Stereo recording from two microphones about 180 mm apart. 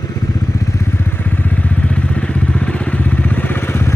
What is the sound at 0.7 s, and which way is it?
Vehicle, 15° left (ahead or behind).